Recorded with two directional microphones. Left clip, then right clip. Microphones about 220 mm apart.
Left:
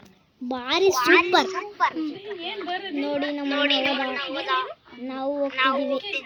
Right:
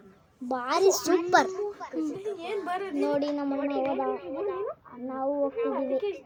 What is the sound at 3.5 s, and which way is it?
Speech, 90° left.